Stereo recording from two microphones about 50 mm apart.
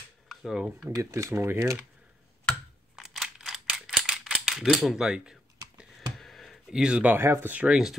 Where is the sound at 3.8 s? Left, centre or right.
Centre.